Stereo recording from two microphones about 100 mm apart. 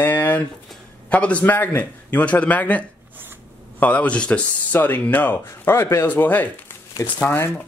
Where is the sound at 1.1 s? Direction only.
15° left (ahead or behind).